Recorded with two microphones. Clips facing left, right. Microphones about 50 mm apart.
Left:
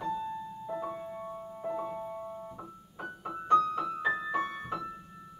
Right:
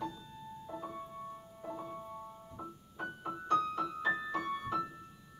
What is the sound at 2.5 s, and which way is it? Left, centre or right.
Keyboard, centre.